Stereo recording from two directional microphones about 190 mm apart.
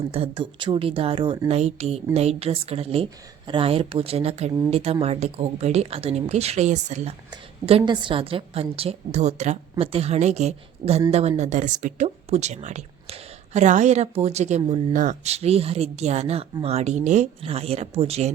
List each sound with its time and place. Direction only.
0.1 s a woman's voice: 30° right (ahead or behind)